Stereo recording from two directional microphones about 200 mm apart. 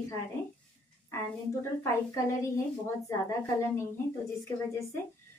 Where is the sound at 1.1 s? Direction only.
15° left (ahead or behind).